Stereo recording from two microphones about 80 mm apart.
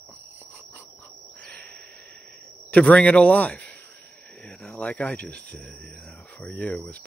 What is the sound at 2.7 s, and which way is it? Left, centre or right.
Speech, centre.